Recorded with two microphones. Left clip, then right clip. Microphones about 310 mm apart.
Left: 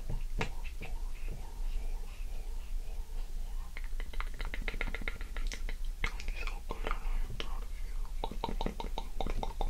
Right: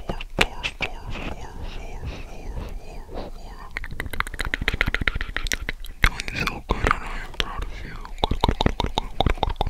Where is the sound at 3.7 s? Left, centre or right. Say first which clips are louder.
Right 18 dB; right.